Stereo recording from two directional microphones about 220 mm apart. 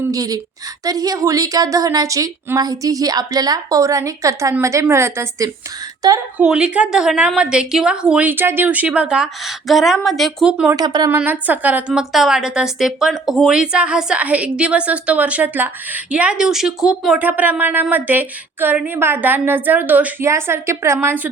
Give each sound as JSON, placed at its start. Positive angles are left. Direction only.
{"t": 0.1, "sound": "a woman's voice", "side_deg": -15}
{"t": 10.8, "sound": "speech", "side_deg": -20}
{"t": 11.1, "sound": "a woman's voice", "side_deg": -10}